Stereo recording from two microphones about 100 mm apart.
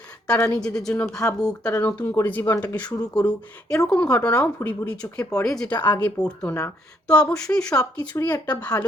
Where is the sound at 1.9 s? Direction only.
35° left (ahead or behind).